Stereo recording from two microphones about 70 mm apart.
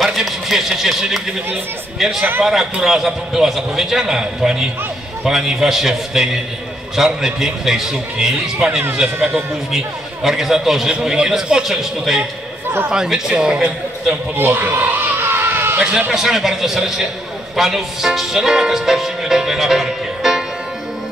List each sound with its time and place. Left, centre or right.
0.0 s a man's voice: centre
14.3 s a sound: right
16.1 s speech: centre